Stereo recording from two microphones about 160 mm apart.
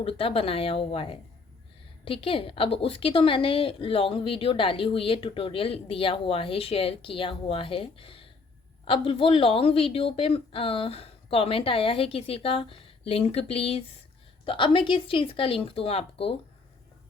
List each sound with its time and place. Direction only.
0.0 s a woman's voice: 35° left (ahead or behind)